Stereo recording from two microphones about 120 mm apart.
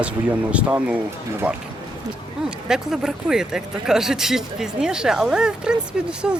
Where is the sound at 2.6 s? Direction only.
5° right (ahead or behind).